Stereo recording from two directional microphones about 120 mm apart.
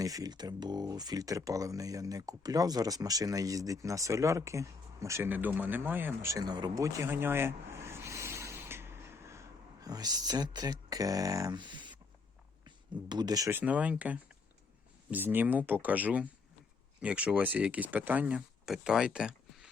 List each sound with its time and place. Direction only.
0.0 s speech: 30° right (ahead or behind)
13.5 s speech: 15° right (ahead or behind)